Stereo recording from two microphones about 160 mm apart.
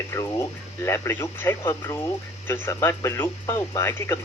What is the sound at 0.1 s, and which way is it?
Speech, 15° left (ahead or behind).